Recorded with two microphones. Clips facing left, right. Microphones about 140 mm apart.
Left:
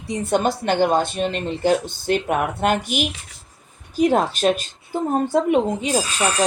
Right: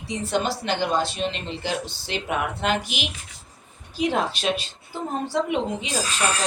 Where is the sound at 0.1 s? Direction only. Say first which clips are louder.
Left 5 dB; 50° left (ahead or behind).